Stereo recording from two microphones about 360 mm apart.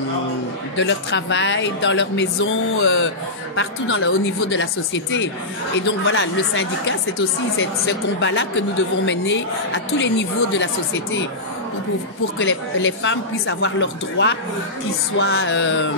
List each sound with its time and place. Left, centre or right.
0.7 s speech: left
12.4 s speech: left